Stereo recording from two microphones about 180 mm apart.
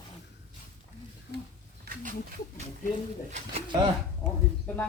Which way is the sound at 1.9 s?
60° right (ahead or behind).